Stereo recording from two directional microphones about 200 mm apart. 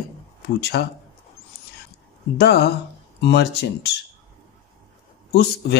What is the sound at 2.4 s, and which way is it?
Speech, 55° left (ahead or behind).